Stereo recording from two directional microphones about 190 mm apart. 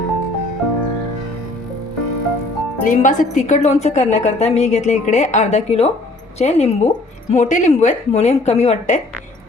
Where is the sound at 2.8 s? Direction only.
45° left (ahead or behind).